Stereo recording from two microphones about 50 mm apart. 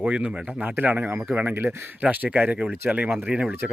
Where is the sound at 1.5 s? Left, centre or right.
Right.